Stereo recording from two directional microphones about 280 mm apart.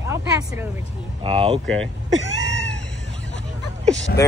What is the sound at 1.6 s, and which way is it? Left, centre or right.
Speech, centre.